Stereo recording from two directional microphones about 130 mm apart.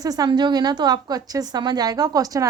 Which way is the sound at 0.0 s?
30° right (ahead or behind).